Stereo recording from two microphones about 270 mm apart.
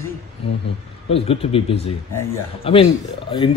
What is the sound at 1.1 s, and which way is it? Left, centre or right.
A man's voice, left.